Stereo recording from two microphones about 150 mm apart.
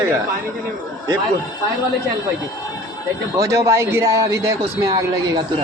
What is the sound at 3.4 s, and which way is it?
A man's voice, 20° right (ahead or behind).